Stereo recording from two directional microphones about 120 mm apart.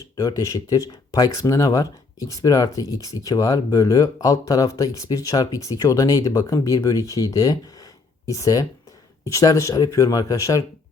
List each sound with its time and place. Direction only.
0.2 s speech: 30° left (ahead or behind)